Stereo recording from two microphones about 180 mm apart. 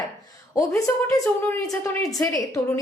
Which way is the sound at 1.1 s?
15° left (ahead or behind).